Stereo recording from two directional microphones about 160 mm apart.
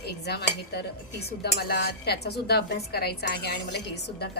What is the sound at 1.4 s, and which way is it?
Speech, 75° left (ahead or behind).